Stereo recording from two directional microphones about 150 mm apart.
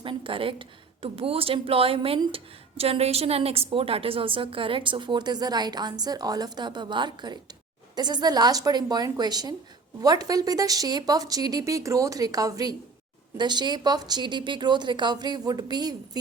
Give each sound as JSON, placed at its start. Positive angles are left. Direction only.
{"t": 0.0, "sound": "a woman's voice", "side_deg": -35}